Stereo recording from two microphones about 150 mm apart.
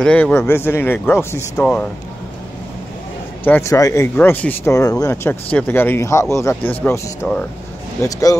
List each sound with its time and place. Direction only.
0.0 s speech: 10° left (ahead or behind)
3.4 s speech: 15° left (ahead or behind)